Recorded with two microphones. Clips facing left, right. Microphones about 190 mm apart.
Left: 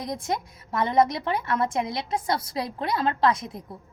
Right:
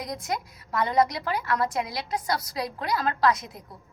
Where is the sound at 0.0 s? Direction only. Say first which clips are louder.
Left 2 dB; 25° left (ahead or behind).